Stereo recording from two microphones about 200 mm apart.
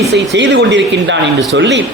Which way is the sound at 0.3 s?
65° right (ahead or behind).